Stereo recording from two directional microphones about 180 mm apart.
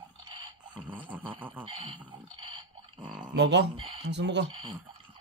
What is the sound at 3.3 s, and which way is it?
Speech, 75° right (ahead or behind).